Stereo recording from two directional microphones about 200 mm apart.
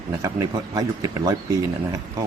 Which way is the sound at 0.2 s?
15° right (ahead or behind).